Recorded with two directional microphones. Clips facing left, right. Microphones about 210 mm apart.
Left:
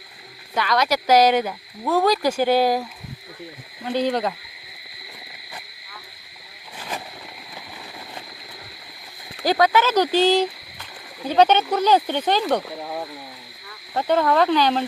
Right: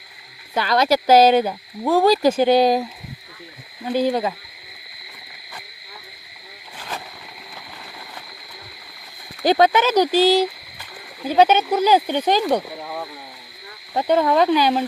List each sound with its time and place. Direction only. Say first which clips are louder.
0.5 s speech: right 3 dB; 30° right (ahead or behind)
3.9 s speech: right 2 dB; 5° right (ahead or behind)
9.4 s speech: right 3 dB; 20° right (ahead or behind)
12.8 s speech: left 1 dB; 20° left (ahead or behind)
13.9 s speech: right 2 dB; 15° right (ahead or behind)